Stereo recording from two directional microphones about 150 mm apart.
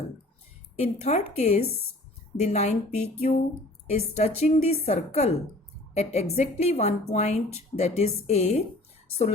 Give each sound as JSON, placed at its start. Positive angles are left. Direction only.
{"t": 0.8, "sound": "a woman's voice", "side_deg": 45}